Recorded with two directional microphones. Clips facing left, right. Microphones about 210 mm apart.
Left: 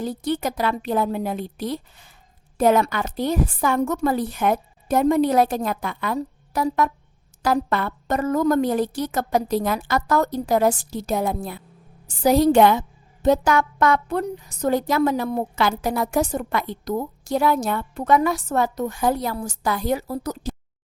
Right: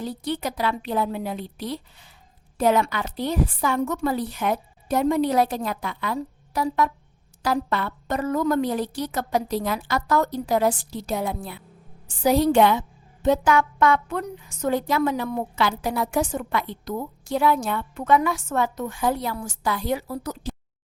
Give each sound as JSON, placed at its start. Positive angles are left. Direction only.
{"t": 0.0, "sound": "a woman's voice", "side_deg": 45}